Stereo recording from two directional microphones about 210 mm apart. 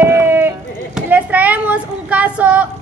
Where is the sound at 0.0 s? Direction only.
10° right (ahead or behind).